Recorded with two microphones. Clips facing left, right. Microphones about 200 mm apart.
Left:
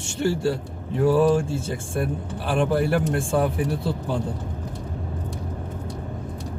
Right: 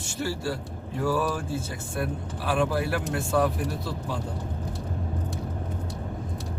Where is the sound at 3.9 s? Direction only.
30° left (ahead or behind).